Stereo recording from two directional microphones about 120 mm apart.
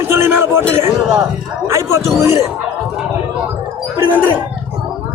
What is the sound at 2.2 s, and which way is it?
Speech, 25° right (ahead or behind).